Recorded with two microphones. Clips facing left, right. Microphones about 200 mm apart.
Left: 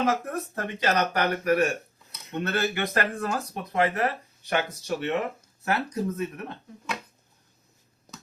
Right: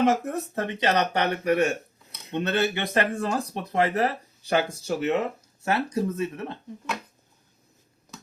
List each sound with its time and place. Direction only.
0.0 s speech: 25° right (ahead or behind)